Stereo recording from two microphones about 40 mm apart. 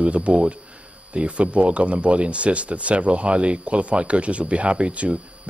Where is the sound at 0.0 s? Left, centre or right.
Right.